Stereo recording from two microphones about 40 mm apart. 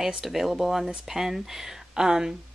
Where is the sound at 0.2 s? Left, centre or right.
Centre.